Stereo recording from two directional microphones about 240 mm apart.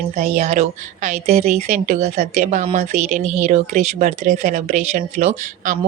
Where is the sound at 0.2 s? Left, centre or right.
Right.